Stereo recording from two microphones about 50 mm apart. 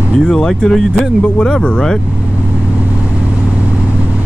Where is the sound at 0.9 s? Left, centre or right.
Centre.